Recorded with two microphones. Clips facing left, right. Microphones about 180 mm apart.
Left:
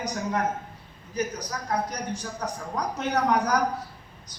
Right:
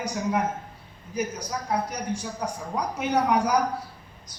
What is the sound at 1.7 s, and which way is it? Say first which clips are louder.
A man's voice: right 1 dB; 10° right (ahead or behind).